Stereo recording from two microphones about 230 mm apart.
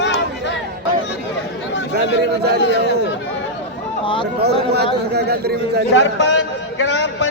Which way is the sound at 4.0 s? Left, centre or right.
Left.